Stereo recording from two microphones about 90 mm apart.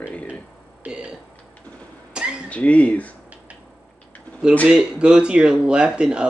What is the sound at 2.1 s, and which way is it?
Cat, 10° right (ahead or behind).